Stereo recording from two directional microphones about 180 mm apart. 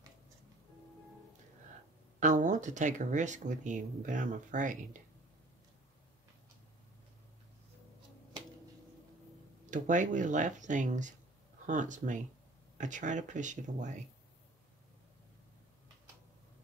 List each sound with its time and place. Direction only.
2.1 s speech: 45° right (ahead or behind)
9.7 s speech: 45° right (ahead or behind)